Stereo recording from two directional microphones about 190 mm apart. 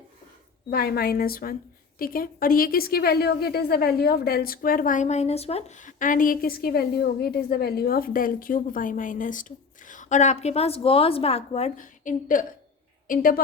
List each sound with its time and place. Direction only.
0.7 s a woman's voice: 55° left (ahead or behind)